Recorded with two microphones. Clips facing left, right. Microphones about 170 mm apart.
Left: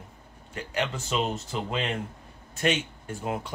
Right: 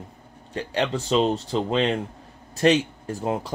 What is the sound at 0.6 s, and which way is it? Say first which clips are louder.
Speech: right 5 dB; 30° right (ahead or behind).